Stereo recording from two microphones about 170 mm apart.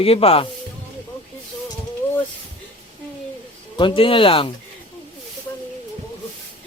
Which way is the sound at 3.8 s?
30° left (ahead or behind).